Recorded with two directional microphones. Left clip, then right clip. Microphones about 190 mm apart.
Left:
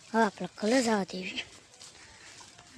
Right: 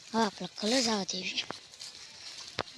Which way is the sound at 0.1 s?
15° left (ahead or behind).